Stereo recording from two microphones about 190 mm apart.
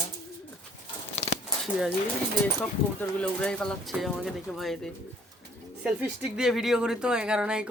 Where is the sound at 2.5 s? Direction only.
10° left (ahead or behind).